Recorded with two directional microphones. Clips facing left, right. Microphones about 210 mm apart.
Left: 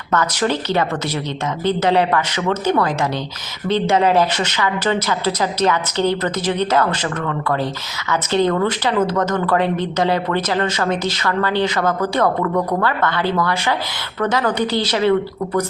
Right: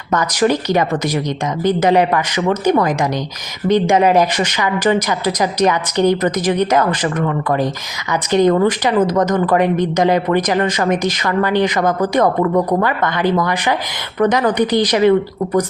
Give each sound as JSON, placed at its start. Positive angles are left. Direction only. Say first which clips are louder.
{"t": 0.1, "sound": "speech", "louder": "right 4 dB", "side_deg": -15}